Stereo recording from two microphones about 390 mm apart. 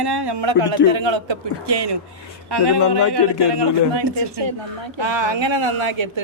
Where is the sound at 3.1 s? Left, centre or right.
Right.